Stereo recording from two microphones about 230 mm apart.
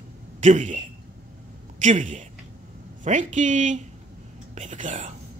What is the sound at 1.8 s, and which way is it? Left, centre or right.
A woman's voice, right.